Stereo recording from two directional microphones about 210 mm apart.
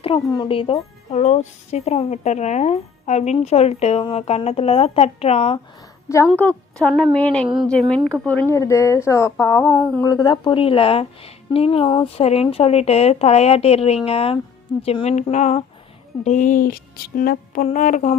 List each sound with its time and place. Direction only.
0.0 s speech: 25° left (ahead or behind)
6.2 s a woman's voice: 5° left (ahead or behind); by 18.1 s 35° left (ahead or behind)